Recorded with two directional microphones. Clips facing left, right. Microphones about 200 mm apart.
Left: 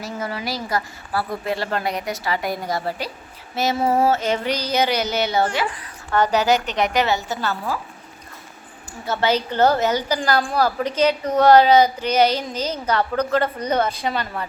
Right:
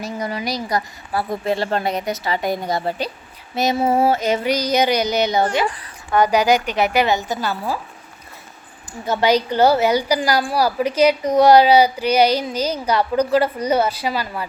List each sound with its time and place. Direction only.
0.0 s a woman's voice: 15° right (ahead or behind)
8.9 s a woman's voice: 15° right (ahead or behind)